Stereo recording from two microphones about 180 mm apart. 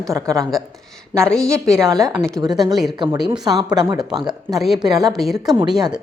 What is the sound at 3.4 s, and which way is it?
A woman's voice, 20° right (ahead or behind).